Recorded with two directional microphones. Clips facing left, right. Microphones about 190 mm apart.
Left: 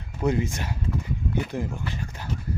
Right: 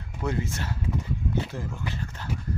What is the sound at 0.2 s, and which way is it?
Speech, 15° left (ahead or behind).